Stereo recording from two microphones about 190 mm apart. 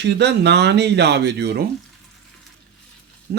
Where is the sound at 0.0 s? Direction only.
65° right (ahead or behind).